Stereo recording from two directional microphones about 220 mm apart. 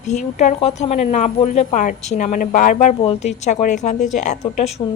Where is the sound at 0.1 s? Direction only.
35° left (ahead or behind).